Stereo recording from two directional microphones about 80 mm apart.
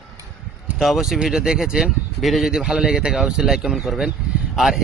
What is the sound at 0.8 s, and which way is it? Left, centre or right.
A man's voice, centre.